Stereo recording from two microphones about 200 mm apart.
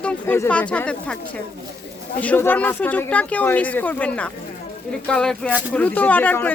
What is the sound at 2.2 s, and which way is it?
Speech, 10° left (ahead or behind).